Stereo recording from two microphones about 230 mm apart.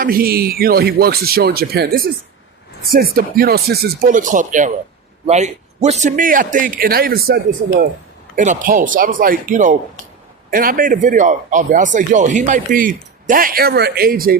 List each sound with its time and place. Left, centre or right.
0.0 s speech: right